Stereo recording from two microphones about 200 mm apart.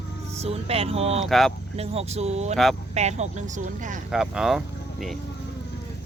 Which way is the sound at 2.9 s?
35° right (ahead or behind).